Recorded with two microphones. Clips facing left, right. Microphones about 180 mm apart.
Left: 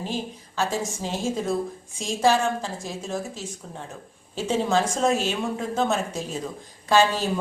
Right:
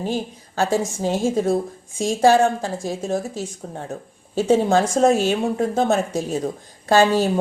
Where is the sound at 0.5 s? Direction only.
50° right (ahead or behind).